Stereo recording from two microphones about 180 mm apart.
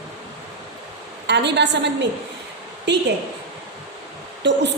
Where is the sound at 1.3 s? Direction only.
75° right (ahead or behind).